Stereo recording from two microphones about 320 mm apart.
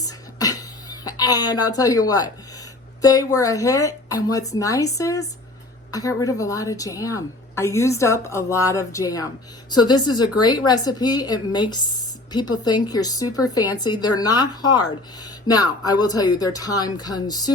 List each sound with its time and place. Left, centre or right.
0.0 s a sound: centre
1.5 s a woman's voice: left
1.7 s a woman's voice: centre